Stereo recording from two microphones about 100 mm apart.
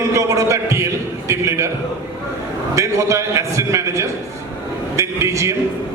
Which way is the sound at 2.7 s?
30° right (ahead or behind).